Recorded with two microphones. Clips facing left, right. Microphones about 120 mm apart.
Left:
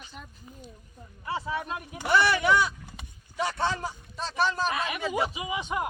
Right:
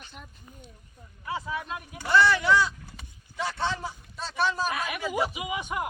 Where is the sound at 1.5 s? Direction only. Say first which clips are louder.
Left 2 dB; 30° left (ahead or behind).